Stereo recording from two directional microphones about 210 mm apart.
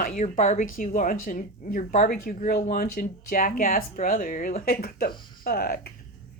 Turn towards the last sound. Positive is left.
turn(degrees=45)  # may be behind; listen again after turning